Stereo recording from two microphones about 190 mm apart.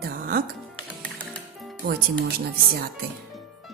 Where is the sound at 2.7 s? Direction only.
55° right (ahead or behind).